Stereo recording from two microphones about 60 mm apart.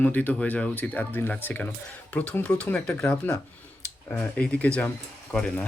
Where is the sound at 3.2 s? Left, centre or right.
Left.